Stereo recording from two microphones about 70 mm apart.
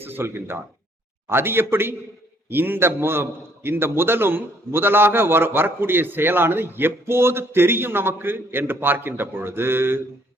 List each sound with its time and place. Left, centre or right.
0.0 s a man's voice: right